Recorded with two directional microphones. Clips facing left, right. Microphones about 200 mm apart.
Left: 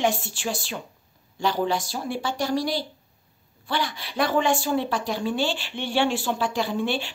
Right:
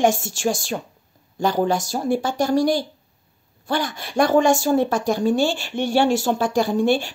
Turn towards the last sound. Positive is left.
turn(degrees=-45)  # may be behind; listen again after turning